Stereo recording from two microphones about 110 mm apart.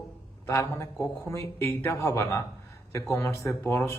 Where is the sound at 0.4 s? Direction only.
25° left (ahead or behind).